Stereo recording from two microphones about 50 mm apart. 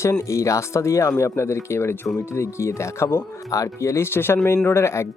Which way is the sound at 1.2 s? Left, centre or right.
Left.